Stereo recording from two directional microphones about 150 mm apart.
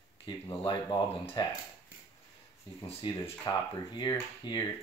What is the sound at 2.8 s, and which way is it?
Speech, 30° left (ahead or behind).